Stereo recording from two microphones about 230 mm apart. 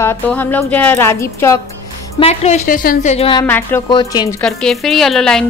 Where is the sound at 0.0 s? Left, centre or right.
Centre.